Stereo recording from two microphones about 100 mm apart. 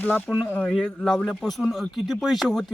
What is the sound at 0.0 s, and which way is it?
A man's voice, 20° left (ahead or behind).